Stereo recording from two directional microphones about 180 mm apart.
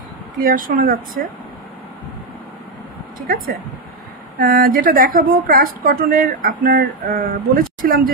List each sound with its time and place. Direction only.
0.5 s a woman's voice: 50° right (ahead or behind)
4.4 s a woman's voice: 55° right (ahead or behind)